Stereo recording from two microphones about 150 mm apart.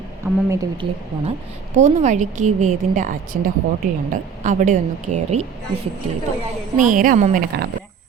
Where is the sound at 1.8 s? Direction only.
50° right (ahead or behind).